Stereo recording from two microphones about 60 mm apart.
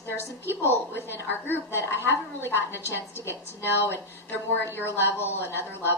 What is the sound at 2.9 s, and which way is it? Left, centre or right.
A woman's voice, left.